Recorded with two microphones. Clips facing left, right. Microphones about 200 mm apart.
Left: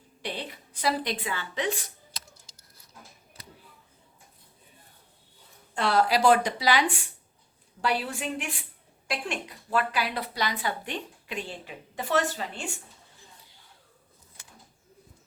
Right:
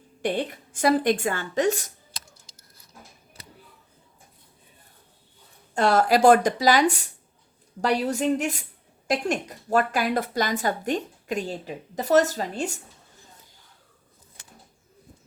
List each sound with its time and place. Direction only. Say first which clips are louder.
0.2 s a woman's voice: right 10 dB; 50° right (ahead or behind)
5.7 s a woman's voice: right 4 dB; 45° right (ahead or behind)